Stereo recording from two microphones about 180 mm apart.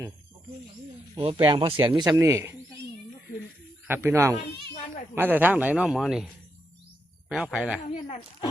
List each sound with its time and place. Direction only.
1.1 s a man's voice: 30° right (ahead or behind)
3.8 s a man's voice: 15° right (ahead or behind)
7.3 s speech: 5° right (ahead or behind)
7.9 s speech: 35° left (ahead or behind)